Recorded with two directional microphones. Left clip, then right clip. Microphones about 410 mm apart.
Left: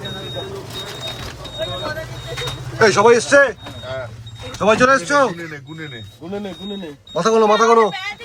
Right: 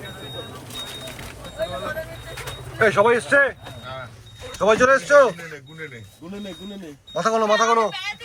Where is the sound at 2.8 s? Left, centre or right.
Centre.